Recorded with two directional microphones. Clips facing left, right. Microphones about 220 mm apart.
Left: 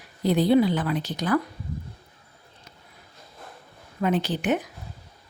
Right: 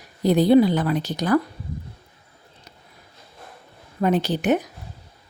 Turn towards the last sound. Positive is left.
turn(degrees=-40)  # may be behind; listen again after turning